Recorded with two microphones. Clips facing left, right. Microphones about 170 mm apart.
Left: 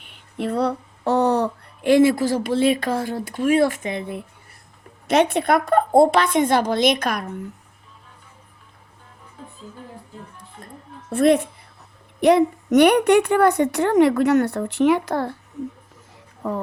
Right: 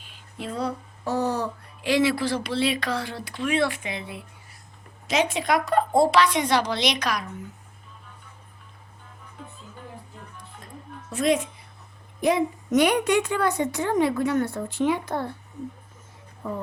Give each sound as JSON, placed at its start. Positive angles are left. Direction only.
{"t": 0.0, "sound": "speech", "side_deg": 65}
{"t": 11.1, "sound": "a woman's voice", "side_deg": 60}
{"t": 16.4, "sound": "speech", "side_deg": 90}